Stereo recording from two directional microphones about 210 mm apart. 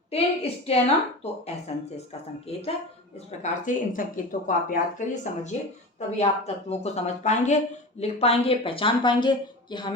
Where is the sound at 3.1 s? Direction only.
35° left (ahead or behind).